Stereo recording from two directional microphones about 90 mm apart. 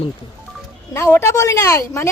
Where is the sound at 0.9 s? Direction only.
30° left (ahead or behind).